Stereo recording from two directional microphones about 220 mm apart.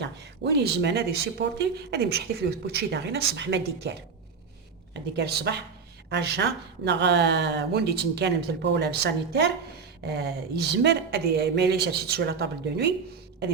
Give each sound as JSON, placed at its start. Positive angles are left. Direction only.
{"t": 0.0, "sound": "speech", "side_deg": -50}
{"t": 4.9, "sound": "speech", "side_deg": -50}